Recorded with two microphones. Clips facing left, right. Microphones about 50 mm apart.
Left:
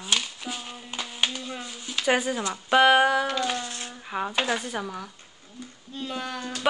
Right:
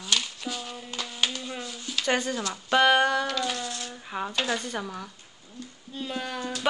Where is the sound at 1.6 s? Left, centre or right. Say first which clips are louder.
Left 3 dB; centre.